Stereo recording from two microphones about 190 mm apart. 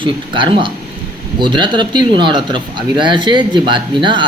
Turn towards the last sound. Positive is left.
turn(degrees=-25)  # may be behind; listen again after turning